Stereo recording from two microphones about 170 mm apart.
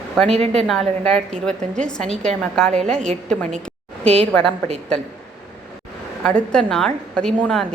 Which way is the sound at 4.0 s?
35° right (ahead or behind).